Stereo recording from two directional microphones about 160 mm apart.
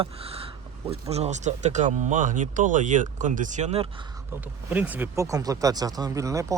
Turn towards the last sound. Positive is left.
turn(degrees=-20)  # may be behind; listen again after turning